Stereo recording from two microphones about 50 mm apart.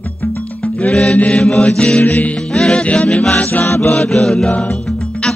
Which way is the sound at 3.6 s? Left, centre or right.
Left.